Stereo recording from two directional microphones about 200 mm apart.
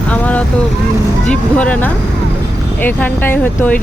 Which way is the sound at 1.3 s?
5° left (ahead or behind).